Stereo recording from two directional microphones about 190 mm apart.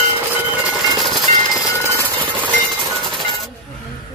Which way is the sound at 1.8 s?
15° right (ahead or behind).